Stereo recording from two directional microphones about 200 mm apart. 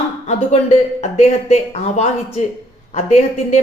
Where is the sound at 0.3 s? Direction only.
35° left (ahead or behind).